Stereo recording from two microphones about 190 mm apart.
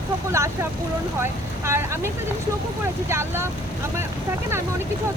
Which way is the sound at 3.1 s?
15° right (ahead or behind).